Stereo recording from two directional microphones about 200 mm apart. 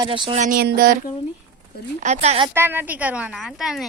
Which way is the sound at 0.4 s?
50° right (ahead or behind).